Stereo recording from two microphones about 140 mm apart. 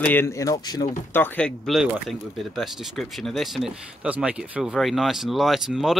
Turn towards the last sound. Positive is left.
turn(degrees=0)  # may be behind; listen again after turning